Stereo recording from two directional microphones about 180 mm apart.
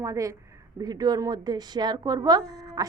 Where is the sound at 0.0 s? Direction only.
15° right (ahead or behind).